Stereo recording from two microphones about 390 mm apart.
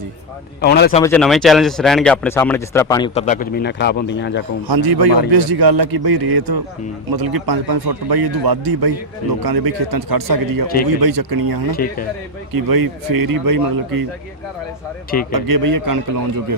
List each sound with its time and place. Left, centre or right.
0.6 s speech: left
1.0 s speech: centre; by 4.4 s left
4.7 s a man's voice: right
11.7 s speech: left
12.5 s a man's voice: right
15.3 s a man's voice: right